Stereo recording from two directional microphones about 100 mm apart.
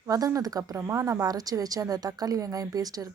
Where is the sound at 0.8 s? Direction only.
25° right (ahead or behind).